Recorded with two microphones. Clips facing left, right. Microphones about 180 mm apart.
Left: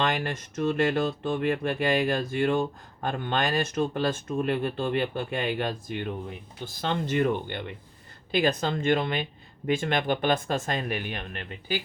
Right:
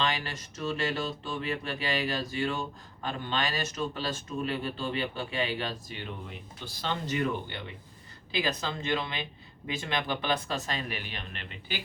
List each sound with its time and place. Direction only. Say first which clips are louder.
0.0 s speech: left 4 dB; 55° left (ahead or behind)